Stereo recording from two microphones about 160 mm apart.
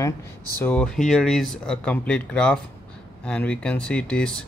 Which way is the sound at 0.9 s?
Centre (ahead or behind).